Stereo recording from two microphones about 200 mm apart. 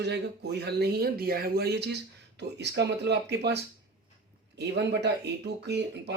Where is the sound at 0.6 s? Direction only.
55° right (ahead or behind).